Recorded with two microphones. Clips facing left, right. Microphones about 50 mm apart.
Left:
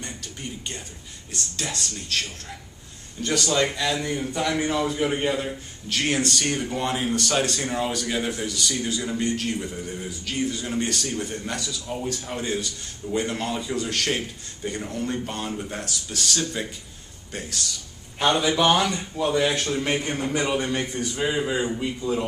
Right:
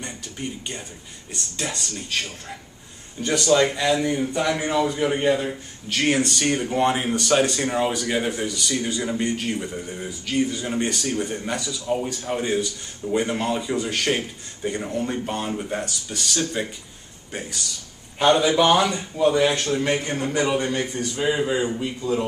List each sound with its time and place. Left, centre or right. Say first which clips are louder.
0.0 s a sound: right 3 dB; centre
1.3 s speech: right 1 dB; centre
6.4 s speech: right 5 dB; centre
11.8 s speech: right 6 dB; right
12.1 s a man's voice: right 4 dB; centre
20.9 s a man's voice: right 1 dB; centre
21.2 s a man's voice: right 3 dB; centre
21.7 s a man's voice: right 1 dB; centre